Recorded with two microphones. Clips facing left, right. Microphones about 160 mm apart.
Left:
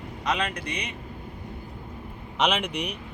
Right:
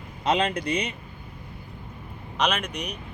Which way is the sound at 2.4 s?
10° left (ahead or behind).